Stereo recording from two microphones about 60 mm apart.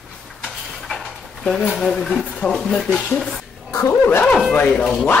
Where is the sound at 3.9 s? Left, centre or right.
Left.